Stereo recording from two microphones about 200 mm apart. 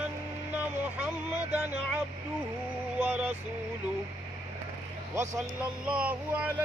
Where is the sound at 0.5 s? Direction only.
5° right (ahead or behind).